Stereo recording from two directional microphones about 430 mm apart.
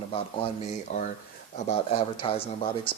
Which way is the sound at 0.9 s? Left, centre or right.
Centre.